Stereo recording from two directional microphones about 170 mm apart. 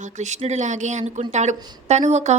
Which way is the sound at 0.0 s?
45° right (ahead or behind).